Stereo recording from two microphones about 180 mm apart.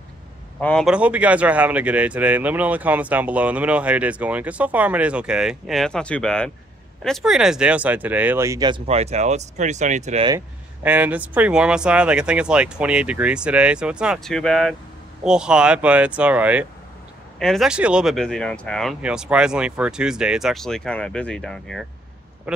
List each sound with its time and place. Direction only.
0.6 s speech: 5° left (ahead or behind); by 10.2 s 40° right (ahead or behind)
10.8 s speech: 10° right (ahead or behind)